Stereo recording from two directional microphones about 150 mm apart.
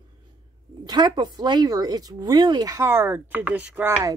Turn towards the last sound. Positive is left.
turn(degrees=-10)  # may be behind; listen again after turning